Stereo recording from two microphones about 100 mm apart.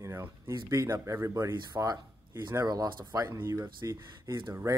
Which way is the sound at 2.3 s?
25° right (ahead or behind).